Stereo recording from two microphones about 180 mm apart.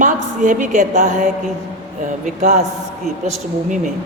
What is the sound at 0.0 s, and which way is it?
A woman's voice, 45° right (ahead or behind).